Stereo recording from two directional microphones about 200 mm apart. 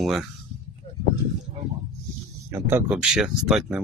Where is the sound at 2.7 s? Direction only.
5° right (ahead or behind).